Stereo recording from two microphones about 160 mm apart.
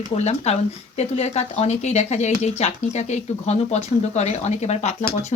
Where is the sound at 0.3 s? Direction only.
40° left (ahead or behind).